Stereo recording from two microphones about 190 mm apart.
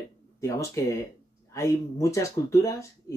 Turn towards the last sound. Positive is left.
turn(degrees=15)  # may be behind; listen again after turning